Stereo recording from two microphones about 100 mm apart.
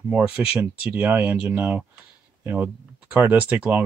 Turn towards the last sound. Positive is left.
turn(degrees=-15)  # may be behind; listen again after turning